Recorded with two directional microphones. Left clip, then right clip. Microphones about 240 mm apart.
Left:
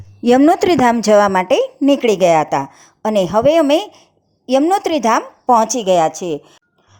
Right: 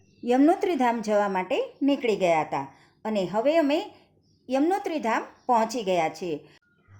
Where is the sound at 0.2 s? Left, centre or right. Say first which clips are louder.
Left 10 dB; left.